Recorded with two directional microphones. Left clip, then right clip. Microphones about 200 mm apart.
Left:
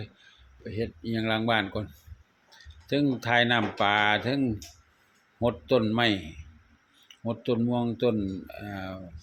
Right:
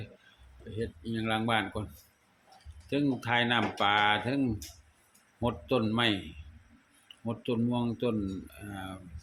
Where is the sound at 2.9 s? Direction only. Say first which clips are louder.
Left 4 dB; 25° left (ahead or behind).